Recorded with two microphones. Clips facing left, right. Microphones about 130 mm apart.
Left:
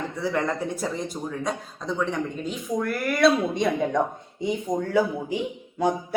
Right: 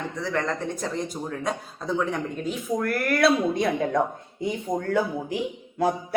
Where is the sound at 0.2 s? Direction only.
10° left (ahead or behind).